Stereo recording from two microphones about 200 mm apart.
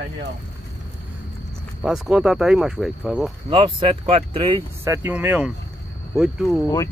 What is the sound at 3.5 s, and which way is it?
Speech, 25° right (ahead or behind).